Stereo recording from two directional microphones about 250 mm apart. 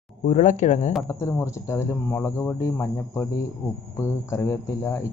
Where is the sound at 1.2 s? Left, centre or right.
Centre.